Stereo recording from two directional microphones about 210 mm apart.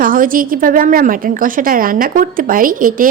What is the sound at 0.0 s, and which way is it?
A woman's voice, 40° right (ahead or behind).